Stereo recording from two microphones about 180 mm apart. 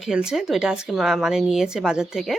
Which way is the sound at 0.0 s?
5° right (ahead or behind).